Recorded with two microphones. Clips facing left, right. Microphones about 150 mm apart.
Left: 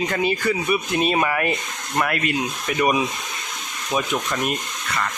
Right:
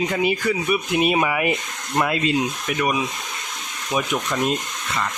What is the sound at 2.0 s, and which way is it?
Speech, 20° right (ahead or behind).